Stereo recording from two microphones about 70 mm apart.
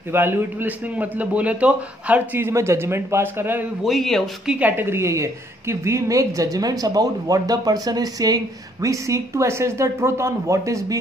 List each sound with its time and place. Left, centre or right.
0.1 s a man's voice: right
2.3 s a man's voice: right
3.8 s a man's voice: centre
4.6 s a woman's voice: right
8.8 s speech: right